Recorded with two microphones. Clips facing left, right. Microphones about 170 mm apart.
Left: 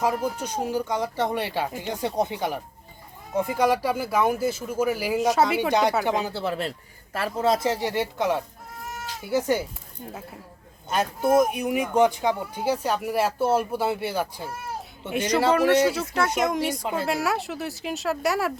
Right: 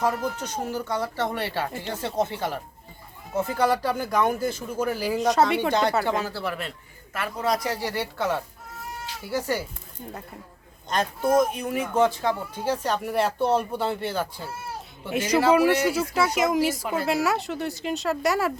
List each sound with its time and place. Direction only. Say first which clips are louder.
0.0 s speech: left 1 dB; 10° left (ahead or behind)
6.0 s a man's voice: left 1 dB; 15° left (ahead or behind)
10.8 s speech: left 1 dB; 5° left (ahead or behind)
15.1 s speech: right 2 dB; 5° right (ahead or behind)
16.8 s a man's voice: even; 20° left (ahead or behind)
17.1 s speech: right 4 dB; centre (ahead or behind)